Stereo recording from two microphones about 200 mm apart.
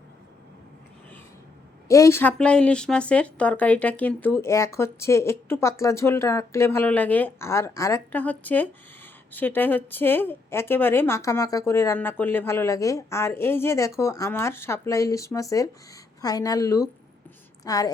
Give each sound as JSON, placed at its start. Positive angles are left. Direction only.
{"t": 1.9, "sound": "speech", "side_deg": 15}